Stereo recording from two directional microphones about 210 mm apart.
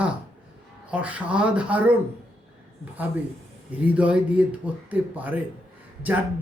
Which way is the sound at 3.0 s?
10° right (ahead or behind).